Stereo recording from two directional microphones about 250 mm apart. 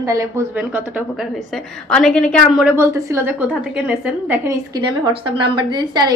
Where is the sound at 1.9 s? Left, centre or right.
Centre.